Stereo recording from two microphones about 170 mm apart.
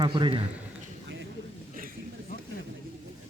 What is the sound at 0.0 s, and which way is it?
Speech, 30° right (ahead or behind).